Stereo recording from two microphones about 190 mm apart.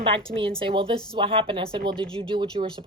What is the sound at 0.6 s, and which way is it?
Speech, 30° right (ahead or behind).